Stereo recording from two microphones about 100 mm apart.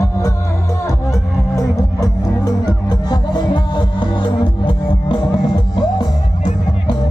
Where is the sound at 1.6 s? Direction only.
40° left (ahead or behind); by 5.2 s 55° left (ahead or behind).